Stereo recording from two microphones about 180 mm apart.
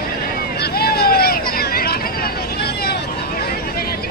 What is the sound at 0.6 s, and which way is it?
Hubbub, 60° left (ahead or behind).